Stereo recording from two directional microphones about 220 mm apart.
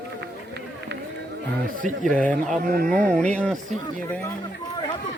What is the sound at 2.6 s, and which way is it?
Speech, 40° right (ahead or behind).